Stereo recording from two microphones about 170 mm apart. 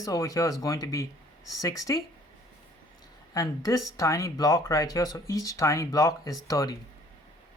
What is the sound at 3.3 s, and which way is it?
Speech, 20° left (ahead or behind).